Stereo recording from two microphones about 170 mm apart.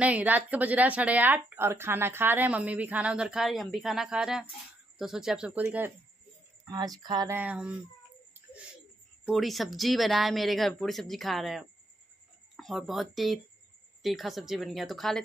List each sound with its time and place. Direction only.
0.0 s speech: 10° right (ahead or behind)
6.6 s speech: 20° right (ahead or behind)
7.3 s speech: 10° right (ahead or behind)
9.2 s speech: centre (ahead or behind)